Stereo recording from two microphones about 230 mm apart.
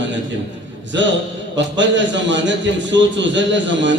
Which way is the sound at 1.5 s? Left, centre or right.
Right.